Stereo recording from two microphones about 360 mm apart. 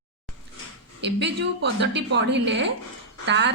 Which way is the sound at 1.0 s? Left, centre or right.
Right.